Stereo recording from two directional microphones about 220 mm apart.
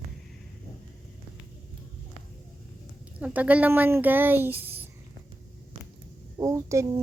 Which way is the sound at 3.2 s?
5° right (ahead or behind).